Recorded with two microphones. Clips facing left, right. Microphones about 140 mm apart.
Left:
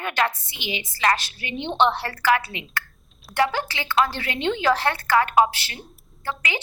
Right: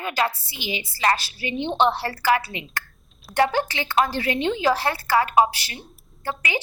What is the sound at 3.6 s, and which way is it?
Speech, 45° right (ahead or behind).